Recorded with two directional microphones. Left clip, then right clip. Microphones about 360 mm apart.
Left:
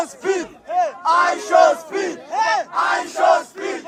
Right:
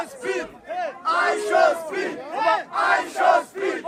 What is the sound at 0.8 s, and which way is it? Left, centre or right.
Battle cry, centre.